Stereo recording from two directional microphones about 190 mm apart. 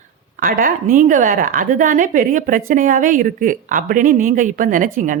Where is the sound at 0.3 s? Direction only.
45° right (ahead or behind).